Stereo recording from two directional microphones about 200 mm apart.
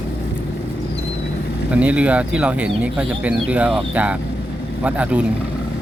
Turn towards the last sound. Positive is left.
turn(degrees=-5)  # may be behind; listen again after turning